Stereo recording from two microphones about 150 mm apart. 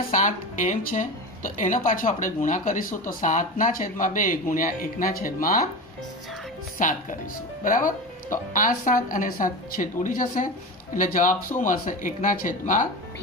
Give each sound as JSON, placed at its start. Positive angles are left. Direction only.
{"t": 0.1, "sound": "speech", "side_deg": 60}
{"t": 6.8, "sound": "speech", "side_deg": 65}